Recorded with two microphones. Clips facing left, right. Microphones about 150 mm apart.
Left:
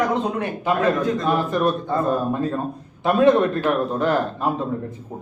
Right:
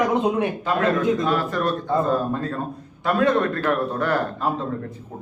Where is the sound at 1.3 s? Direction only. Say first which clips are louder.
Left 2 dB; 15° left (ahead or behind).